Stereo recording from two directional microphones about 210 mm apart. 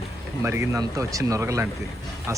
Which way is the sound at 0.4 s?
10° right (ahead or behind).